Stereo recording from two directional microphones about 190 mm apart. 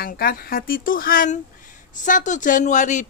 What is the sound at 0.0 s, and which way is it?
Speech, 50° left (ahead or behind).